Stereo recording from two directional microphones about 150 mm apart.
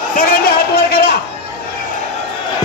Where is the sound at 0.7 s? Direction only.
90° left.